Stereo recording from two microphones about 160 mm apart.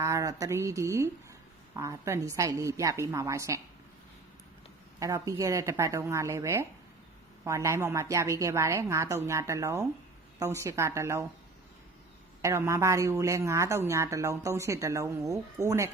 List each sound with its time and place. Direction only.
0.0 s speech: 20° right (ahead or behind)
4.9 s a woman's voice: 20° right (ahead or behind)
12.4 s speech: 15° right (ahead or behind)